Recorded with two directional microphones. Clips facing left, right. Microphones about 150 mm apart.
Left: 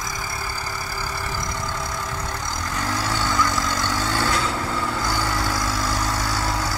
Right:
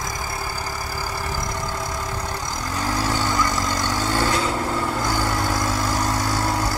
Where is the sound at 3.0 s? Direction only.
45° right (ahead or behind).